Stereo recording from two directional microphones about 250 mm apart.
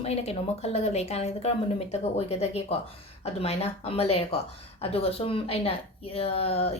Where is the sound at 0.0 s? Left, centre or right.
Left.